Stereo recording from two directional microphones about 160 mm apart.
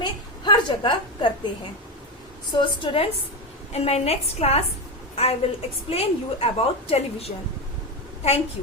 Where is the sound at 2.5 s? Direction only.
35° left (ahead or behind).